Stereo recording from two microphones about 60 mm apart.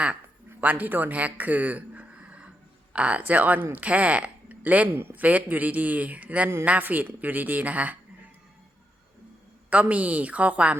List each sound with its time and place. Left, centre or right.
0.6 s a man's voice: right
9.6 s a man's voice: right